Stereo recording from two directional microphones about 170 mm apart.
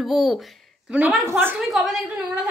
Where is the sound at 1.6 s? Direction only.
Centre (ahead or behind).